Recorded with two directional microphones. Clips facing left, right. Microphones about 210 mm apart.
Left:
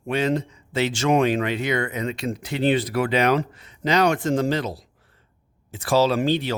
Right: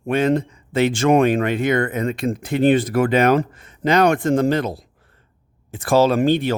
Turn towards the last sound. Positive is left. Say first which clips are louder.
# right 4 dB
turn(degrees=-50)  # may be behind; listen again after turning